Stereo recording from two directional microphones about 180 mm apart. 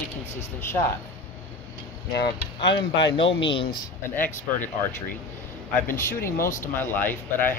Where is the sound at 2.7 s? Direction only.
75° left (ahead or behind).